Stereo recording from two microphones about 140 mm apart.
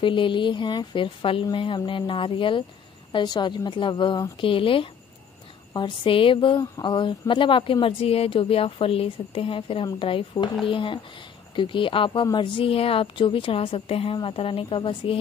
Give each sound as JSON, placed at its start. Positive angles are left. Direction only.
{"t": 0.0, "sound": "a woman's voice", "side_deg": 35}